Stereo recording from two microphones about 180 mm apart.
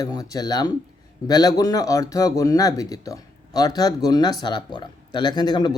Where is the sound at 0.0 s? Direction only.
20° left (ahead or behind).